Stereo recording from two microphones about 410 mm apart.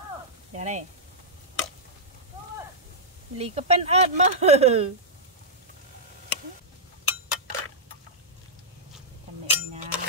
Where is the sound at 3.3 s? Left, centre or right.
Centre.